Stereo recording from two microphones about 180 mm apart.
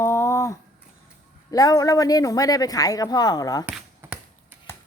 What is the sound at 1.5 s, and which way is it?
Speech, 20° left (ahead or behind).